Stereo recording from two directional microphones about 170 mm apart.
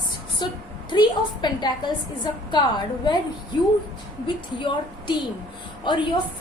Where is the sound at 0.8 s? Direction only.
25° left (ahead or behind).